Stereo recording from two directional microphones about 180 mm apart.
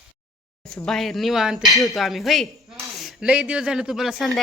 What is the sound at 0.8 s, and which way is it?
Speech, centre (ahead or behind).